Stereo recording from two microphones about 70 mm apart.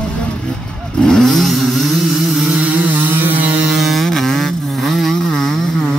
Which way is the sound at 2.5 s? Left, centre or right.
Centre.